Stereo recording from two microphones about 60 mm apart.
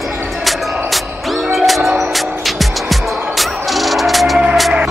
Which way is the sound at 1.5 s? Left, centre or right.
Centre.